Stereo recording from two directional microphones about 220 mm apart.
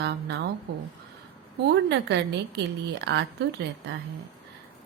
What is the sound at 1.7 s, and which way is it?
Speech, 50° right (ahead or behind).